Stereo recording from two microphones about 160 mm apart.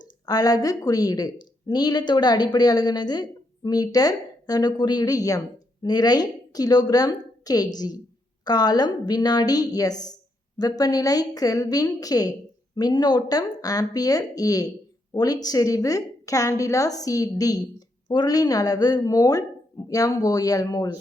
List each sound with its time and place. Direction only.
0.3 s a woman's voice: 25° left (ahead or behind)